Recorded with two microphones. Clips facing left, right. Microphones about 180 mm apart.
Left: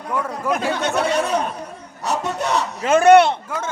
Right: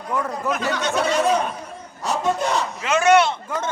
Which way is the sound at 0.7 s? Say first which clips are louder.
Even; 60° left (ahead or behind).